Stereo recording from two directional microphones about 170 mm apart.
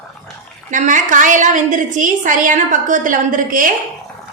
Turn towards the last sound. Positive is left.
turn(degrees=-50)  # may be behind; listen again after turning